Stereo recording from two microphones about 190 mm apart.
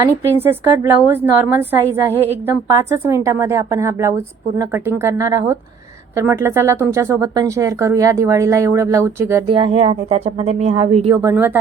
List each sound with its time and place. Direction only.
0.3 s a woman's voice: 10° right (ahead or behind)
9.5 s speech: 30° right (ahead or behind)
11.2 s a woman's voice: 15° right (ahead or behind)